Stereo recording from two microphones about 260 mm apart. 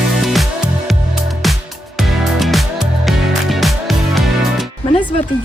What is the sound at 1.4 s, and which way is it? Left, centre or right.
Music, centre.